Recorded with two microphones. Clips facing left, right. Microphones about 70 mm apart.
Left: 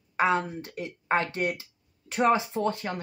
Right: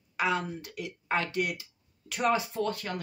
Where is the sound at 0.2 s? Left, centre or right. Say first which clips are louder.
Left 5 dB; left.